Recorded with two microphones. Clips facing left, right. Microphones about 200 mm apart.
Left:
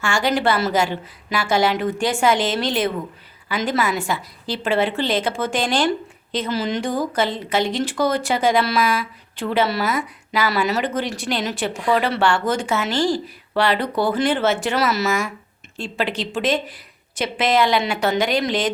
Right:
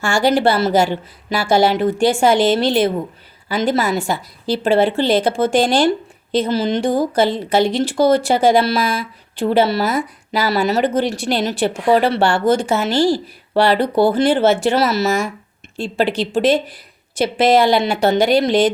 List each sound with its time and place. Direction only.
0.0 s speech: 35° right (ahead or behind)